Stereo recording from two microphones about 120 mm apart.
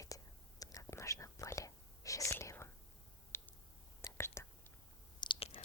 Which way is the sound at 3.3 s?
20° left (ahead or behind).